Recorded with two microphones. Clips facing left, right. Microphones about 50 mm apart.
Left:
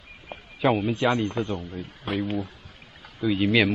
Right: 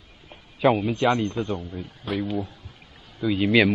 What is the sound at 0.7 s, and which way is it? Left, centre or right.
A man's voice, centre.